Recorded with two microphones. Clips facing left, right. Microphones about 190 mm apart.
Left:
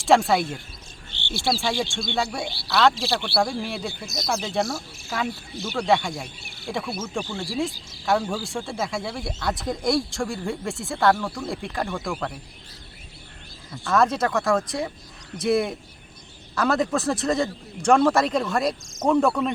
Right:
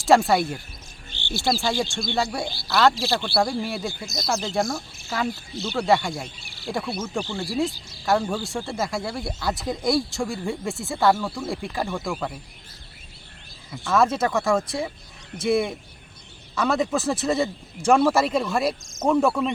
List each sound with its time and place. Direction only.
0.0 s speech: centre (ahead or behind)
1.1 s cricket: 65° left (ahead or behind)
1.5 s speech: centre (ahead or behind)
6.2 s cricket: 55° left (ahead or behind)
6.7 s speech: centre (ahead or behind)
13.7 s speech: 5° right (ahead or behind)